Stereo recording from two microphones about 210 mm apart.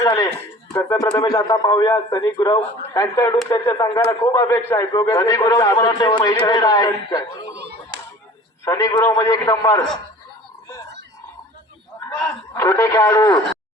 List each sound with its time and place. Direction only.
0.0 s a man's voice: 20° left (ahead or behind)
7.5 s a sound: 50° right (ahead or behind)
8.6 s a man's voice: 15° left (ahead or behind)
12.0 s a man's voice: 5° left (ahead or behind)